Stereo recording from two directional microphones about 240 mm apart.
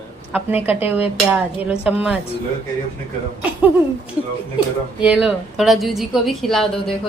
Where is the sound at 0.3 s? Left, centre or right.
Centre.